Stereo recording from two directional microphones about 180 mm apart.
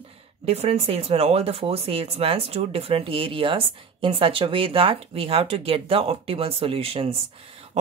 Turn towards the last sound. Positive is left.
turn(degrees=-30)  # may be behind; listen again after turning